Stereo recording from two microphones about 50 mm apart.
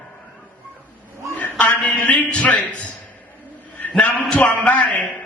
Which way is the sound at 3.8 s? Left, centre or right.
Left.